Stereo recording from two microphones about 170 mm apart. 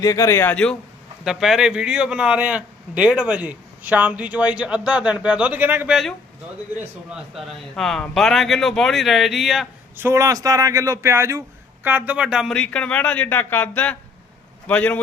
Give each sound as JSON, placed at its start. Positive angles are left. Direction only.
{"t": 0.0, "sound": "a man's voice", "side_deg": 20}
{"t": 10.0, "sound": "a man's voice", "side_deg": -15}